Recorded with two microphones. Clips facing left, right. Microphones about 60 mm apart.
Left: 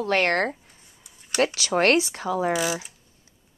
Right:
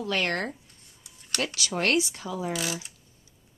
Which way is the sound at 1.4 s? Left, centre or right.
Left.